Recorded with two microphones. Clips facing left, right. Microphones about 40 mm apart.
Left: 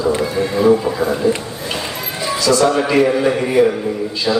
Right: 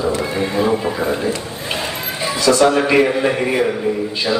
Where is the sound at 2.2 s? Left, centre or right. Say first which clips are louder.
Right 1 dB; right.